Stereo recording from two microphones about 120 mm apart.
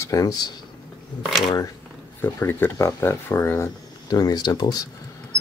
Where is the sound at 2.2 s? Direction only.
20° left (ahead or behind).